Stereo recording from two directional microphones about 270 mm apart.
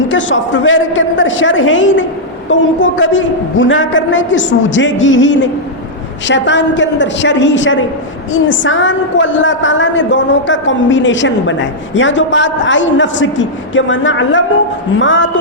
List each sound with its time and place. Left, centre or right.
0.1 s a woman's voice: left